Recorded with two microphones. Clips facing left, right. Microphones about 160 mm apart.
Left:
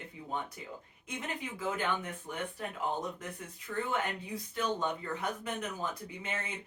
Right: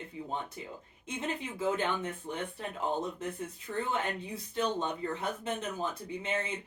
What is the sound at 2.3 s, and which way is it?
Speech, 25° right (ahead or behind).